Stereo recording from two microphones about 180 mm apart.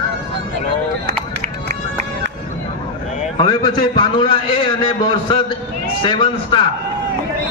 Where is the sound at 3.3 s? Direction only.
20° left (ahead or behind).